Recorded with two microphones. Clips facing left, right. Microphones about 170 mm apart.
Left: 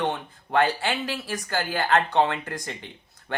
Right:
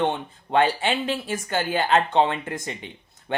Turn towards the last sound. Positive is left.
turn(degrees=-20)  # may be behind; listen again after turning